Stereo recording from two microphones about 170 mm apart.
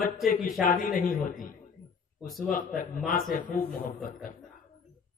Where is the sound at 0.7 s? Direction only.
55° left (ahead or behind).